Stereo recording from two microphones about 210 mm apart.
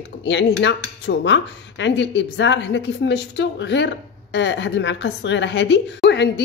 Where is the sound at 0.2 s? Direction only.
55° left (ahead or behind).